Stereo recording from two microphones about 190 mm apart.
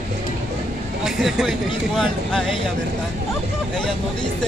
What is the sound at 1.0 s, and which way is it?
Speech, centre (ahead or behind).